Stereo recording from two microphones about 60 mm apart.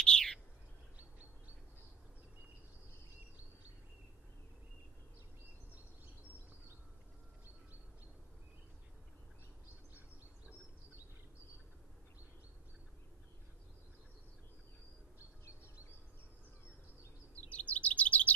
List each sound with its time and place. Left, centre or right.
0.0 s chirp: centre
17.5 s chirp: left